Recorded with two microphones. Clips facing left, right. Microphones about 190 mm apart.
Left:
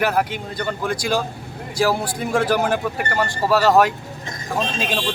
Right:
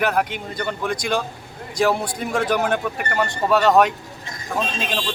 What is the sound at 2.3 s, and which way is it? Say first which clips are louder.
Speech: left 2 dB; 5° left (ahead or behind).